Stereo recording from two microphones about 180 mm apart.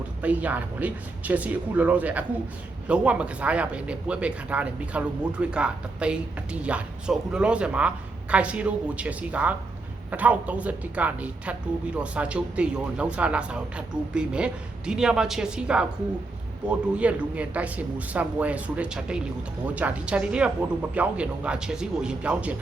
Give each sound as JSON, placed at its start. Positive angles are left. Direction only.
{"t": 0.2, "sound": "speech", "side_deg": -10}